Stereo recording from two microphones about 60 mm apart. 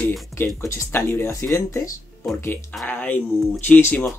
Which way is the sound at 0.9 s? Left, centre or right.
Left.